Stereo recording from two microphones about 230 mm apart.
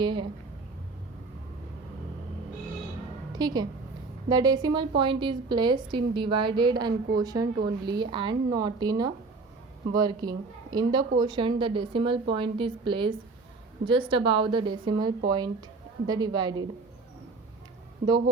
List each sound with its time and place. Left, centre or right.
0.0 s a woman's voice: centre
3.3 s a woman's voice: centre
18.0 s a woman's voice: right